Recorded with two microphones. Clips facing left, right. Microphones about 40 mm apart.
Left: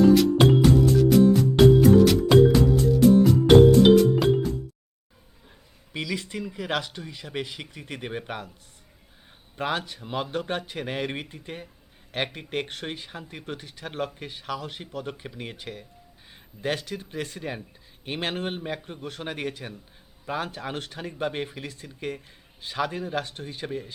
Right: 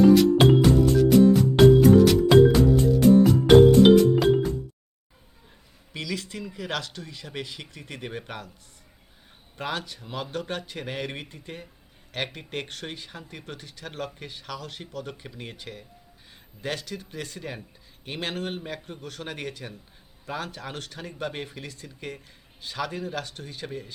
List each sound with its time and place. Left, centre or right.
0.1 s music: centre
5.9 s speech: centre
9.6 s speech: centre